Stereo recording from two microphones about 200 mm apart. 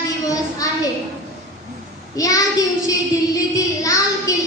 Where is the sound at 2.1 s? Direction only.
15° left (ahead or behind).